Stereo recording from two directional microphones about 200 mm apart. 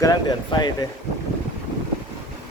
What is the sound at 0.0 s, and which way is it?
Speech, 20° left (ahead or behind).